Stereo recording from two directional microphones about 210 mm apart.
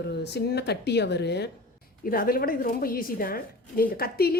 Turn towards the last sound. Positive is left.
turn(degrees=45)  # may be behind; listen again after turning